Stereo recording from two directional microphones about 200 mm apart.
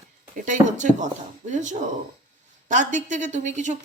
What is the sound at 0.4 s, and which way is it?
A woman's voice, 40° right (ahead or behind).